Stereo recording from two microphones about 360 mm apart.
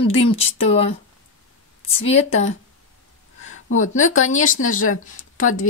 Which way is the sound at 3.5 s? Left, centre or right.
Left.